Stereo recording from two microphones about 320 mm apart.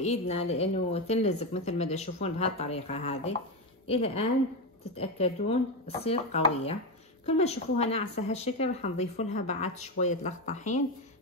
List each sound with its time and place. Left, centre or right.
0.0 s a woman's voice: centre